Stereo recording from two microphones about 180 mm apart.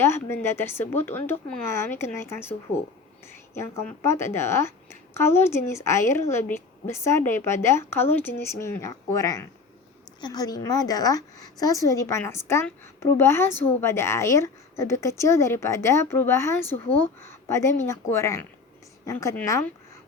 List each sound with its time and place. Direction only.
0.0 s speech: 15° left (ahead or behind)